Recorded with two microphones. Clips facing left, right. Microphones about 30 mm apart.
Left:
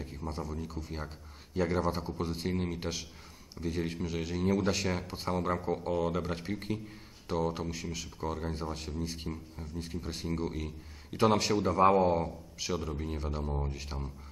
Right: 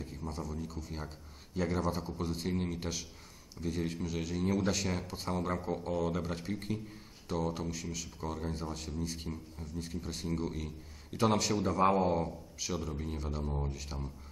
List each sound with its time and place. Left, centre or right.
0.0 s speech: centre
5.9 s speech: left
11.1 s speech: left
11.5 s speech: centre